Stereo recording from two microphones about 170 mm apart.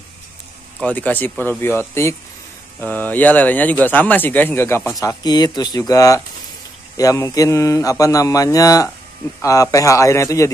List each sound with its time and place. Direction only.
0.7 s speech: 10° left (ahead or behind)